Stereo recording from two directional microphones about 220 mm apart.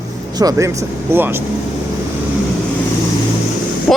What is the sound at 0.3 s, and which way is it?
Speech, 15° right (ahead or behind).